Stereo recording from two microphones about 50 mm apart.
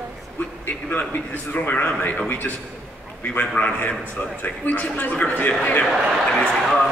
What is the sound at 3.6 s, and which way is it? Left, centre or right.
Speech, left.